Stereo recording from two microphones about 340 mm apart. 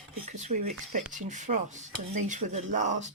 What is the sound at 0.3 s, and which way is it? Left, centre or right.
Speech, right.